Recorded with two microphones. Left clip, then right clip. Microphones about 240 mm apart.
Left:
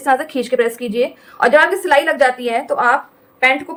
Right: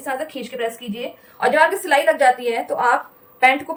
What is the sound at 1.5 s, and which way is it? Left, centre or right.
A woman's voice, centre.